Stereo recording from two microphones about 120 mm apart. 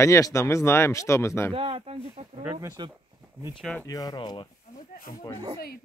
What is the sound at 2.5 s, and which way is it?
Speech, 35° right (ahead or behind).